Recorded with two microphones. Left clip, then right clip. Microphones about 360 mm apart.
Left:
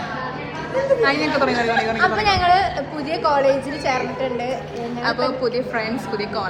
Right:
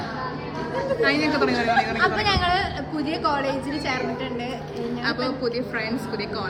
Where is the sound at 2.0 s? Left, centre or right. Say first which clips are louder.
Left 4 dB; centre.